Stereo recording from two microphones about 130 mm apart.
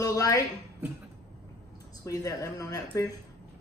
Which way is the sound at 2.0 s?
25° left (ahead or behind).